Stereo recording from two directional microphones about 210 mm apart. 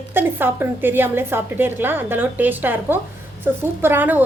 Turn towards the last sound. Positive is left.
turn(degrees=-10)  # may be behind; listen again after turning